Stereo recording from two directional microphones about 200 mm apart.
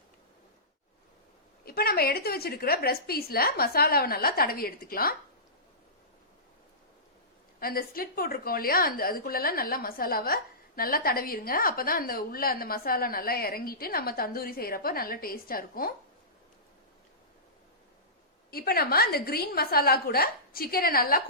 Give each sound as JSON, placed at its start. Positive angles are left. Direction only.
{"t": 1.6, "sound": "a woman's voice", "side_deg": 50}
{"t": 7.6, "sound": "a woman's voice", "side_deg": 45}
{"t": 18.5, "sound": "a woman's voice", "side_deg": 50}